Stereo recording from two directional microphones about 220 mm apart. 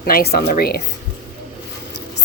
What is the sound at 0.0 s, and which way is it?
Speech, 45° left (ahead or behind).